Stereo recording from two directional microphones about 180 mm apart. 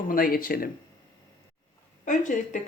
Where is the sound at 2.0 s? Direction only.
45° left (ahead or behind).